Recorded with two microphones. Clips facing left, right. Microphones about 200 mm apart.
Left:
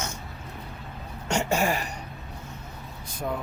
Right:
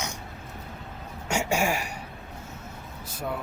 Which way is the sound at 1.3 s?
10° right (ahead or behind).